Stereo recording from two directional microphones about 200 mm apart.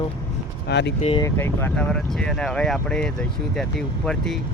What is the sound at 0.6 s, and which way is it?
Speech, 60° left (ahead or behind).